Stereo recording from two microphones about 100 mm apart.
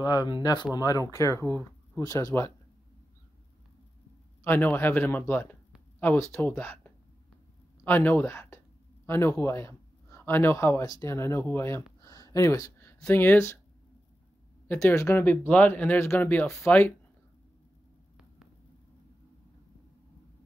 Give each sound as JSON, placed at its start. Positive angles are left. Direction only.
{"t": 0.0, "sound": "speech", "side_deg": 40}
{"t": 0.7, "sound": "speech", "side_deg": 35}
{"t": 4.5, "sound": "a man's voice", "side_deg": 20}
{"t": 14.7, "sound": "speech", "side_deg": 25}